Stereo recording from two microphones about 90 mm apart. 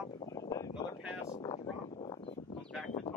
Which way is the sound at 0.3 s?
40° left (ahead or behind).